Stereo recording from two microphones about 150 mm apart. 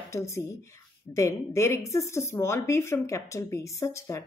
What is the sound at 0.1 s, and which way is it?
A woman's voice, 20° left (ahead or behind).